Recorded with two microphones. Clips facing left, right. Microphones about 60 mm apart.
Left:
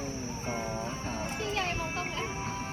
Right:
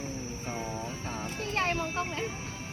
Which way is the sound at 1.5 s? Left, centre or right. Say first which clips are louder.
Right 6 dB; right.